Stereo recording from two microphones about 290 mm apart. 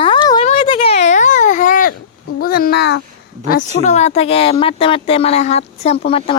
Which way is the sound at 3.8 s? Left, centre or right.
Left.